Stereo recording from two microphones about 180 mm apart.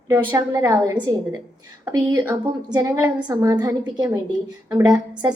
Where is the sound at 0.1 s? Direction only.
15° right (ahead or behind).